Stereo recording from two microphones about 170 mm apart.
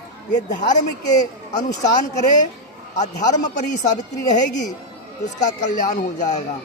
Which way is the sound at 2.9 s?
45° left (ahead or behind).